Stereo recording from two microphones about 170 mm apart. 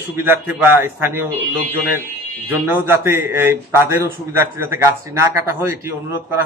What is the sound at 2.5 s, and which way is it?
A man's voice, 15° right (ahead or behind).